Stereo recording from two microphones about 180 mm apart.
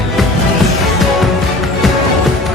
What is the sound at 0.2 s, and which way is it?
Music, centre (ahead or behind).